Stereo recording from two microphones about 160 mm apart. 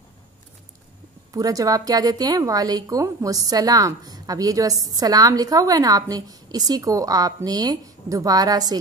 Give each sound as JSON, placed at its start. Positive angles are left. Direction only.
{"t": 1.3, "sound": "a woman's voice", "side_deg": -20}